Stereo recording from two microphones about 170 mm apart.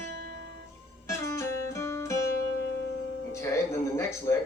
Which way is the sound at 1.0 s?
15° left (ahead or behind).